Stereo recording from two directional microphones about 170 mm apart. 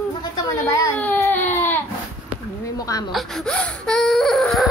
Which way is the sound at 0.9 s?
10° left (ahead or behind).